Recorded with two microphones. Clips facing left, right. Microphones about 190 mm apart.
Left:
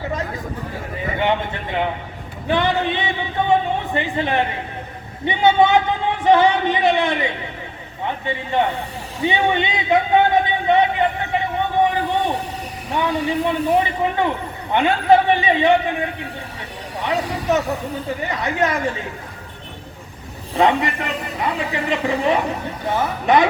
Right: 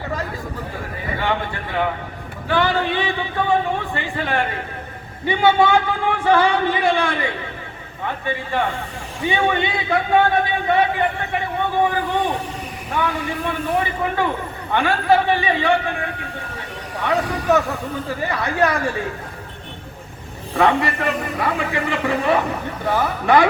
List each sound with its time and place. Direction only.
1.2 s a man's voice: 20° left (ahead or behind)
13.0 s speech: 20° left (ahead or behind)
20.6 s speech: 20° left (ahead or behind)